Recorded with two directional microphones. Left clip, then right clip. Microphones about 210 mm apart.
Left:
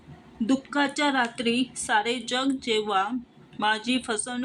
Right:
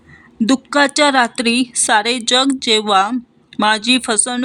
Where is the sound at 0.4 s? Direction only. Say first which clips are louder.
Right 11 dB; 45° right (ahead or behind).